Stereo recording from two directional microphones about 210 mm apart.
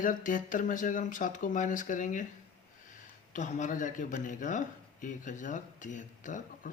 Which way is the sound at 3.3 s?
35° left (ahead or behind).